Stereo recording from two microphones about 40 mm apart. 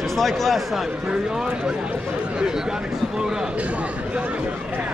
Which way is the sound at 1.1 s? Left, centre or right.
Centre.